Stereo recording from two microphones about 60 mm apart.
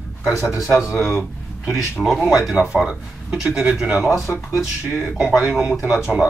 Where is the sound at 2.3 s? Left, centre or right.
Centre.